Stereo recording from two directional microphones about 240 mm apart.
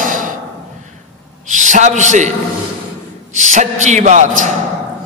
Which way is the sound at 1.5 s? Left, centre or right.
Right.